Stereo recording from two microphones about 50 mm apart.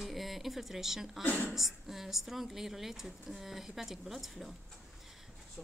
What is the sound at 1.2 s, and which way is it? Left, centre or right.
Speech, left.